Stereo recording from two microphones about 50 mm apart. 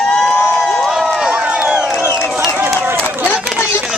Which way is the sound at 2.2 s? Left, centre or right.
Centre.